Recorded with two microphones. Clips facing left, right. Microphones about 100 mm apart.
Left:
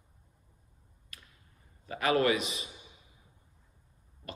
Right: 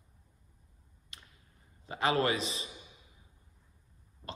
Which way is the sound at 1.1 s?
25° right (ahead or behind).